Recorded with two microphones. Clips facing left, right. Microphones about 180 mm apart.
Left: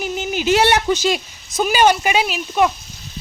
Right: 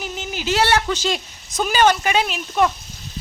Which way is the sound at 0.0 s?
15° left (ahead or behind).